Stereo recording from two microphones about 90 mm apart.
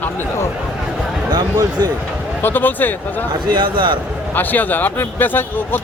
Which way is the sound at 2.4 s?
20° left (ahead or behind).